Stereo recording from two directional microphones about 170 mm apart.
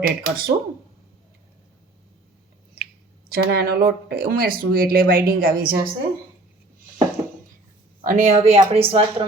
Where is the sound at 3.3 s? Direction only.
70° right (ahead or behind).